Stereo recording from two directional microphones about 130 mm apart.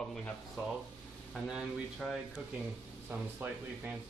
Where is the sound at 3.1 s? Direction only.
10° right (ahead or behind).